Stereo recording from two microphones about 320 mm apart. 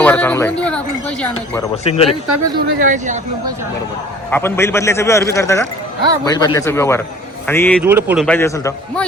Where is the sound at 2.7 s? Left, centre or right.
Right.